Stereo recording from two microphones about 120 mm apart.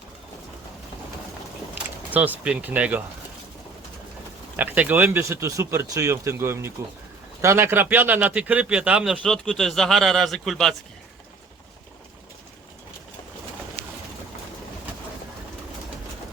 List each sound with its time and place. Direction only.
2.0 s speech: 15° right (ahead or behind)
4.5 s speech: 15° right (ahead or behind)
9.2 s a man's voice: 5° left (ahead or behind)